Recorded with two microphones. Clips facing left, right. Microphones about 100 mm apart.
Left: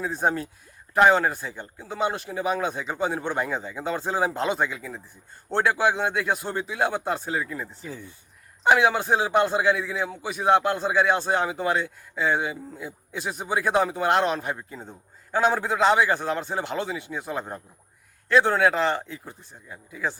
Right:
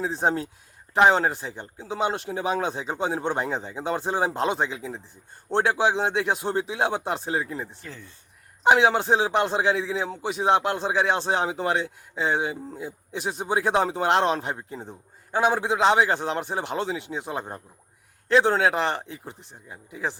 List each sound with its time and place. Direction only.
0.0 s a man's voice: 25° right (ahead or behind)
7.8 s speech: 10° left (ahead or behind)
8.6 s a man's voice: 25° right (ahead or behind)